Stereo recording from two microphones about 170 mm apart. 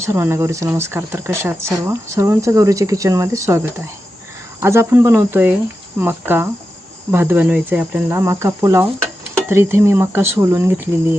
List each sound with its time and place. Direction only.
0.0 s speech: 15° right (ahead or behind)